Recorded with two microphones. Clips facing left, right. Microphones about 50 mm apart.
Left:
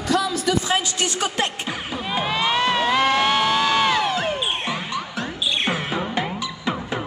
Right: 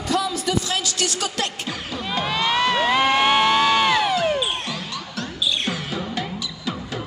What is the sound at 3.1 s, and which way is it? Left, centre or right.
Crowd, centre.